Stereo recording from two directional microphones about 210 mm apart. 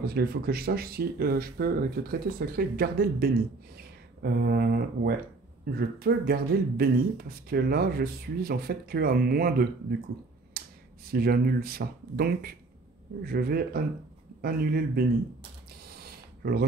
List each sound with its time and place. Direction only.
0.0 s speech: 50° right (ahead or behind)
10.6 s finger snapping: 45° right (ahead or behind)
11.1 s speech: 45° right (ahead or behind)
15.8 s a sound: 45° right (ahead or behind)